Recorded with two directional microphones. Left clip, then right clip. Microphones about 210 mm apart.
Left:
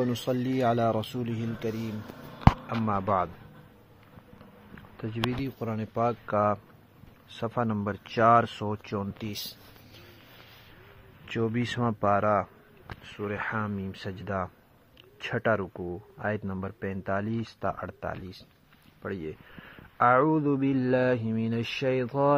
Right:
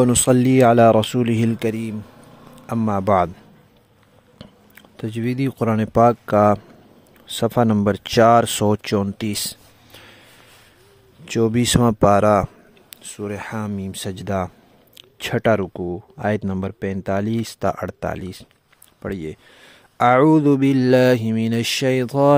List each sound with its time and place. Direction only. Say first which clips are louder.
0.0 s speech: right 13 dB; 60° right (ahead or behind)
4.9 s speech: right 7 dB; 70° right (ahead or behind)
11.2 s speech: right 11 dB; 65° right (ahead or behind)
15.8 s speech: right 9 dB; 50° right (ahead or behind)
16.3 s speech: right 10 dB; 65° right (ahead or behind)